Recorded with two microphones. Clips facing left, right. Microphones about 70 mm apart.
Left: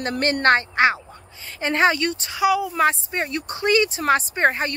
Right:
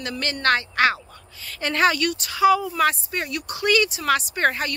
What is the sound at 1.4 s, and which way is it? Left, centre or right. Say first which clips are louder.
Speech: left 1 dB; left.